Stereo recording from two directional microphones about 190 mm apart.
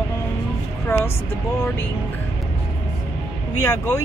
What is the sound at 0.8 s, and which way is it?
Vehicle, 10° left (ahead or behind).